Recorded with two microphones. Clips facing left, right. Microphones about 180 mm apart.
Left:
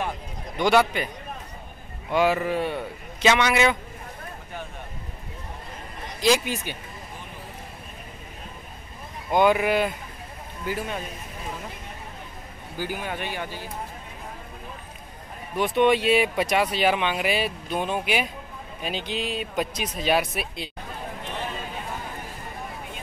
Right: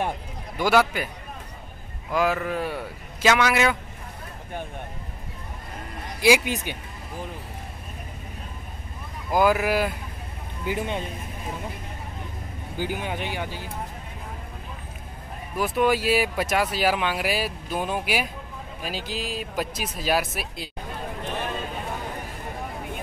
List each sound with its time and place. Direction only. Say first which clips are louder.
0.6 s speech: left 1 dB; 5° right (ahead or behind)
2.0 s speech: left 2 dB; centre (ahead or behind)
6.2 s speech: right 2 dB; 15° right (ahead or behind)
9.3 s speech: left 1 dB; centre (ahead or behind)
10.6 s speech: right 2 dB; 20° right (ahead or behind)
12.7 s speech: right 1 dB; 15° right (ahead or behind)
15.5 s speech: left 2 dB; centre (ahead or behind)